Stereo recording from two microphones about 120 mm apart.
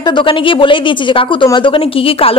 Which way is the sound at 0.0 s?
40° left (ahead or behind).